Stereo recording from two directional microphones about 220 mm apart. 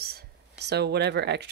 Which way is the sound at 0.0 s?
45° right (ahead or behind).